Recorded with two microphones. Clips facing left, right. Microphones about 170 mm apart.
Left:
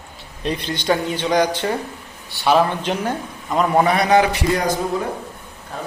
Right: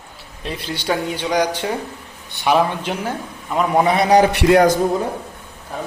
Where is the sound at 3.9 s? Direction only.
25° right (ahead or behind).